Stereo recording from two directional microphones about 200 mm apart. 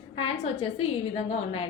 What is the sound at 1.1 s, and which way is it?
Speech, 30° left (ahead or behind).